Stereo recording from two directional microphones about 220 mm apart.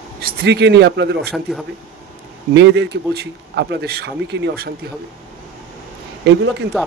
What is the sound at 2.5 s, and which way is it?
A man's voice, 50° right (ahead or behind).